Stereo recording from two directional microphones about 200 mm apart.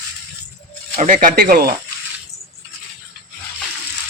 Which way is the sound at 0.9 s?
40° right (ahead or behind).